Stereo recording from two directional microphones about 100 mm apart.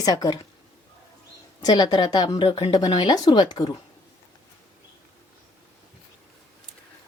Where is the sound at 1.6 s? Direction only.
40° left (ahead or behind).